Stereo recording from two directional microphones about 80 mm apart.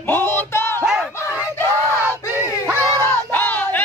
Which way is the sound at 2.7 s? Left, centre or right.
Right.